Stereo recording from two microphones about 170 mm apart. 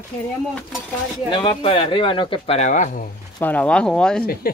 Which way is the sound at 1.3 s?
30° left (ahead or behind).